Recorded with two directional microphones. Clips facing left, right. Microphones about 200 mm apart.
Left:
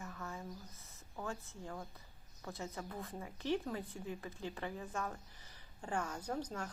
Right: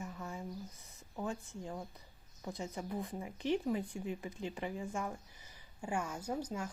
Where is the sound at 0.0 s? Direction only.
15° right (ahead or behind).